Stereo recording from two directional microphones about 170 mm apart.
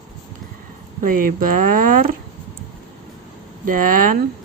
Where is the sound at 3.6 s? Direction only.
55° right (ahead or behind).